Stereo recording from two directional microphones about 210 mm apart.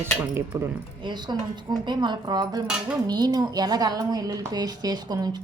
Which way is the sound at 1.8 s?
20° right (ahead or behind).